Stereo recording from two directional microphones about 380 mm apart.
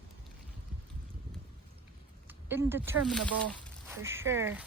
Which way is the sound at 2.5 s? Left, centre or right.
Centre.